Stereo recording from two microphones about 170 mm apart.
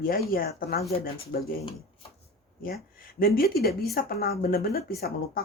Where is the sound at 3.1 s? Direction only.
60° left (ahead or behind).